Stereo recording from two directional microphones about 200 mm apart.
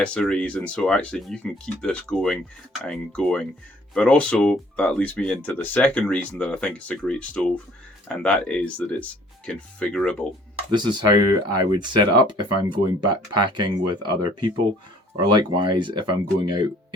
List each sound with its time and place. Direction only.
0.0 s speech: 5° left (ahead or behind)
10.8 s speech: 20° right (ahead or behind)